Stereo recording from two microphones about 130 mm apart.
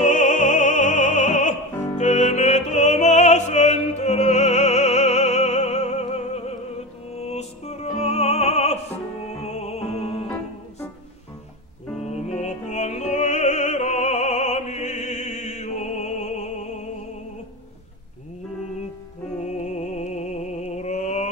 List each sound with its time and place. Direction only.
0.0 s music: 70° left (ahead or behind); by 10.2 s 50° left (ahead or behind)
12.0 s music: 60° left (ahead or behind)
19.4 s music: 60° left (ahead or behind)